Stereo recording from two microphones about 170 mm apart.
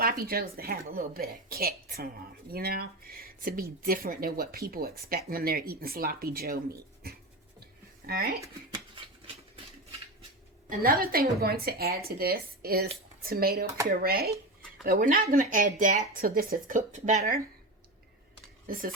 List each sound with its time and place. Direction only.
0.0 s speech: 60° right (ahead or behind)
7.0 s a sound: 65° right (ahead or behind)
10.7 s speech: 60° right (ahead or behind)
18.6 s speech: 55° right (ahead or behind)